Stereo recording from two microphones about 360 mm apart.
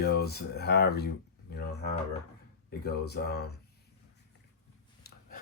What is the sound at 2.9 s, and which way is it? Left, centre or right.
Speech, left.